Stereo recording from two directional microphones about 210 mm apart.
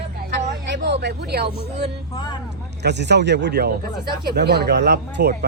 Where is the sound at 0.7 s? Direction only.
55° right (ahead or behind).